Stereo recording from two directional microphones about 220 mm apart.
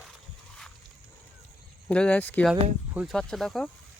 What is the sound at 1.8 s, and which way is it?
Speech, 5° left (ahead or behind).